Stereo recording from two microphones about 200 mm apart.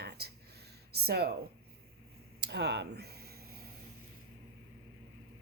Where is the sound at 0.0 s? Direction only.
55° right (ahead or behind).